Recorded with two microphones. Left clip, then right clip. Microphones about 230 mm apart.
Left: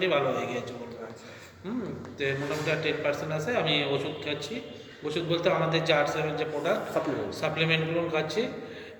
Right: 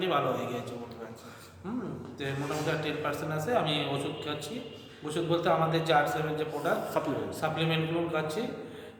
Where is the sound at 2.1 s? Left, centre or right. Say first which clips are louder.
Left 4 dB; centre.